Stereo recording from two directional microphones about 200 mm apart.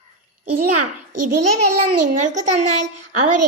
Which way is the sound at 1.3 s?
35° right (ahead or behind).